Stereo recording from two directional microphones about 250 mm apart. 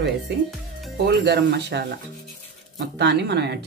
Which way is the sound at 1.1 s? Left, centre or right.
Right.